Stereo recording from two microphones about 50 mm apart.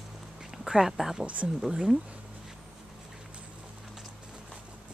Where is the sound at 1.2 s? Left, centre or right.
Right.